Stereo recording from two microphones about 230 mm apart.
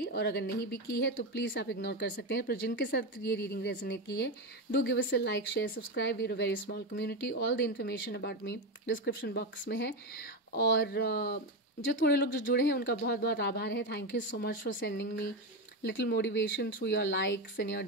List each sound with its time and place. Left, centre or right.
0.0 s a woman's voice: left